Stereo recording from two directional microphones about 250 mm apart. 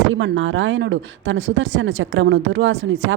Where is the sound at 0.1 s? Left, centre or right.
Right.